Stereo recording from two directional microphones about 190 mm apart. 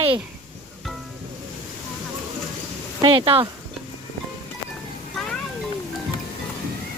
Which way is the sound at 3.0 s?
25° right (ahead or behind).